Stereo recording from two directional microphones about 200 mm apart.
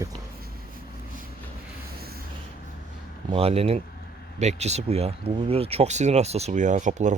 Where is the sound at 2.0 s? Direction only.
50° right (ahead or behind).